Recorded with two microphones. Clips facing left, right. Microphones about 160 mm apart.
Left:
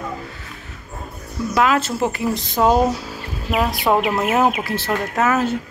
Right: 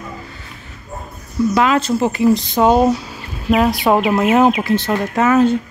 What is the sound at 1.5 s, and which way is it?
Speech, centre (ahead or behind).